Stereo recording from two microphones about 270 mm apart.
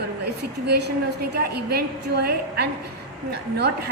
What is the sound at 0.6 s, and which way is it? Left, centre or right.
A woman's voice, right.